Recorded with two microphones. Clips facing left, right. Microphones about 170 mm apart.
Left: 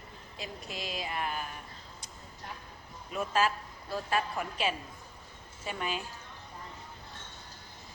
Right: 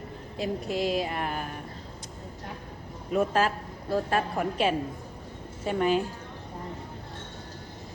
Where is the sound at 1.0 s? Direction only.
55° right (ahead or behind).